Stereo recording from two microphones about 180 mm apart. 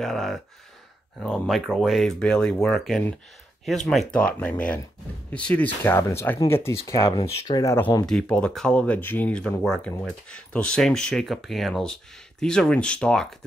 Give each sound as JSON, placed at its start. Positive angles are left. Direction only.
{"t": 0.0, "sound": "speech", "side_deg": 0}
{"t": 8.1, "sound": "speech", "side_deg": 5}